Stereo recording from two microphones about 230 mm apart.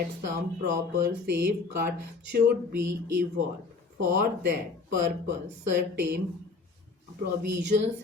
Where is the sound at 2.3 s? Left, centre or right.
Right.